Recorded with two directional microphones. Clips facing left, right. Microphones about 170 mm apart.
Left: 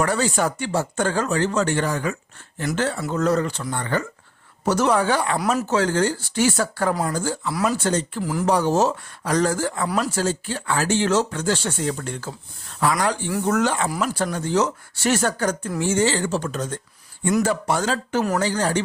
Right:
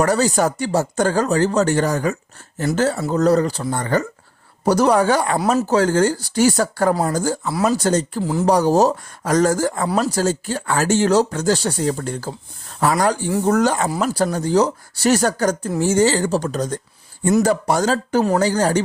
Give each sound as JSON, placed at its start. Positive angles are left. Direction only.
{"t": 0.0, "sound": "speech", "side_deg": -40}
{"t": 7.4, "sound": "speech", "side_deg": -25}
{"t": 7.9, "sound": "speech", "side_deg": -40}
{"t": 8.2, "sound": "speech", "side_deg": -25}
{"t": 8.4, "sound": "speech", "side_deg": -40}
{"t": 9.8, "sound": "speech", "side_deg": -30}